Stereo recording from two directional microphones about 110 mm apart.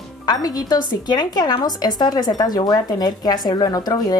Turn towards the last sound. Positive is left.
turn(degrees=35)  # may be behind; listen again after turning